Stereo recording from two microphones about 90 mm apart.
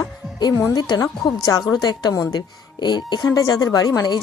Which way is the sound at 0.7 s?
45° left (ahead or behind).